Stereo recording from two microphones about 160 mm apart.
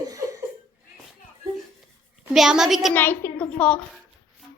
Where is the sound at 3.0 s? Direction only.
10° left (ahead or behind).